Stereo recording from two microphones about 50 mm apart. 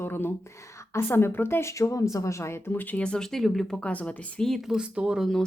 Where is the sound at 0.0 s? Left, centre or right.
Left.